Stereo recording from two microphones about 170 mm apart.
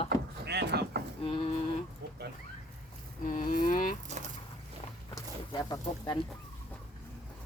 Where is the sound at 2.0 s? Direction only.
75° right (ahead or behind).